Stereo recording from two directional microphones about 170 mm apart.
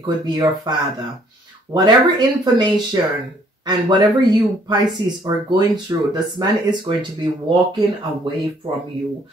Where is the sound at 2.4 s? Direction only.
25° right (ahead or behind).